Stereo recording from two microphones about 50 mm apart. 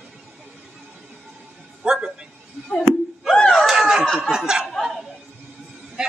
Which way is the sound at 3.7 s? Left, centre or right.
Centre.